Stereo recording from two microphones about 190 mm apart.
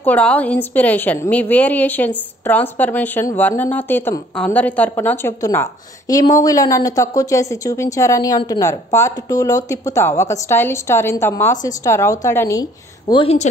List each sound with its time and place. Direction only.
0.0 s a woman's voice: 10° left (ahead or behind)
13.1 s a woman's voice: 30° left (ahead or behind)